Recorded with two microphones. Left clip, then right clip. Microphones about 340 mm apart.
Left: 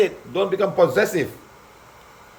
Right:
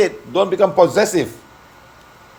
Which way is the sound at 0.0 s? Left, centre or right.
Centre.